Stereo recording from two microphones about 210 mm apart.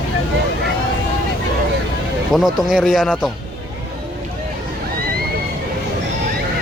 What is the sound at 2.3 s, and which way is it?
Speech, centre (ahead or behind).